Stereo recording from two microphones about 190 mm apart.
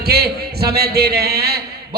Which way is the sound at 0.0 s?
55° right (ahead or behind).